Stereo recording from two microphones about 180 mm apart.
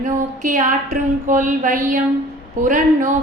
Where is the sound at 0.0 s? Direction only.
45° right (ahead or behind).